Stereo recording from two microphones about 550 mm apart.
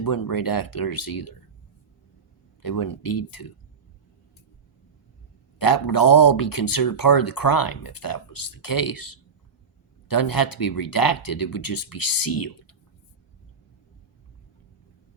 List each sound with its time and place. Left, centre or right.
0.0 s speech: left
2.6 s speech: left
5.5 s speech: left